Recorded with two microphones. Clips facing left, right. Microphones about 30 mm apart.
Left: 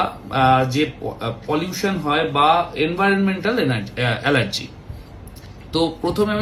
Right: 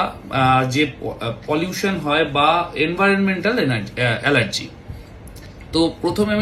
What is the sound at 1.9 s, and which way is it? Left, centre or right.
Speech, right.